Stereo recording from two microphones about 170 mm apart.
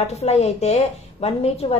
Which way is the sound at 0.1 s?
40° left (ahead or behind).